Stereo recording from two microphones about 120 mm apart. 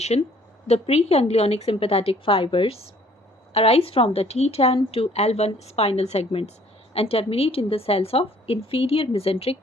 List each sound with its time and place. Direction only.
0.1 s a woman's voice: 60° left (ahead or behind)